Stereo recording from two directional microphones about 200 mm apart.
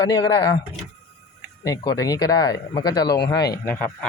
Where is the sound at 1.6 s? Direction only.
20° left (ahead or behind).